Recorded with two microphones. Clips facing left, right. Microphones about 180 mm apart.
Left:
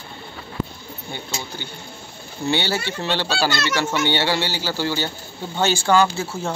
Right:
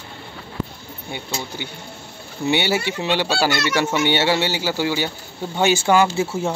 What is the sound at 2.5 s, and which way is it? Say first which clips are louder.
Speech: right 3 dB; 20° right (ahead or behind).